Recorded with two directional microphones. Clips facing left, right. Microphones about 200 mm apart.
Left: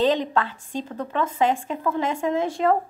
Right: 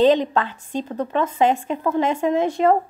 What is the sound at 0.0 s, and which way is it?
Speech, 20° right (ahead or behind).